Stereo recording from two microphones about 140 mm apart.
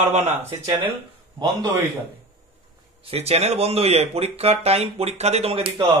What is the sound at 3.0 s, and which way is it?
Speech, 45° right (ahead or behind).